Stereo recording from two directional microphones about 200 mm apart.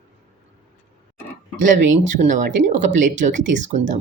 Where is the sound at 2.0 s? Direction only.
40° right (ahead or behind).